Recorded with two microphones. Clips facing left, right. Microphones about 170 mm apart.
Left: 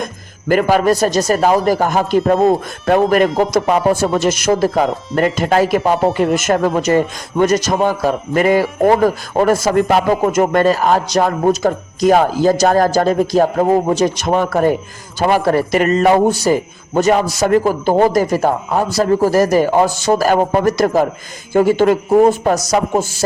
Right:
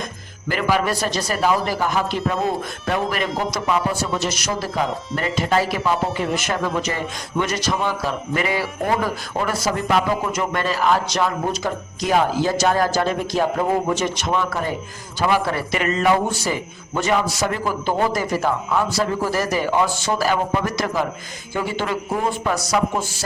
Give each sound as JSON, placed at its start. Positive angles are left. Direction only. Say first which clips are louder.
{"t": 0.0, "sound": "a man's voice", "louder": "left 6 dB", "side_deg": 50}